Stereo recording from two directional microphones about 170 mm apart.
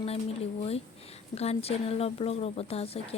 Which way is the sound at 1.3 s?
35° left (ahead or behind).